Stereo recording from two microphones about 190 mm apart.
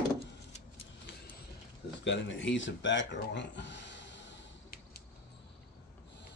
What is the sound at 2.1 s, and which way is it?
Speech, 75° left (ahead or behind).